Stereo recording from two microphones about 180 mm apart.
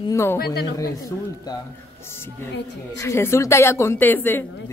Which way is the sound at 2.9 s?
15° left (ahead or behind).